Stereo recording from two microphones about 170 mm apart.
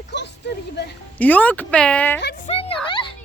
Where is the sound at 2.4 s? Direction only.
30° left (ahead or behind).